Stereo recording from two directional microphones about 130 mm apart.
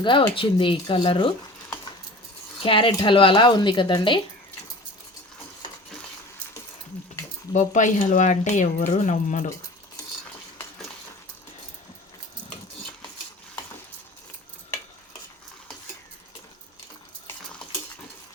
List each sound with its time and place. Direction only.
0.0 s speech: 40° left (ahead or behind)
2.6 s speech: 45° left (ahead or behind)
7.5 s speech: 70° left (ahead or behind)
8.9 s speech: 80° left